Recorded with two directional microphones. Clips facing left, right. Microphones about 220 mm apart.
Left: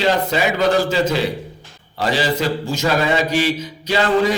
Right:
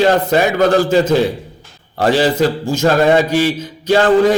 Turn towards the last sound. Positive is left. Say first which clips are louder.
# right 6 dB
turn(degrees=-45)  # may be behind; listen again after turning